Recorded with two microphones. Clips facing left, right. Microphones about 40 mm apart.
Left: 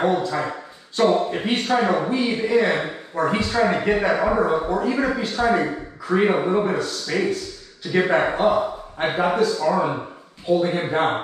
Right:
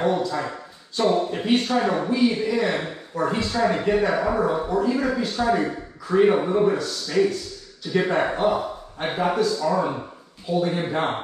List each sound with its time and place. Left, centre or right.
0.0 s a man's voice: left